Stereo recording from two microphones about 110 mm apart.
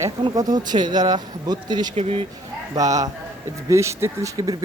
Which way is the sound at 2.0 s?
65° right (ahead or behind).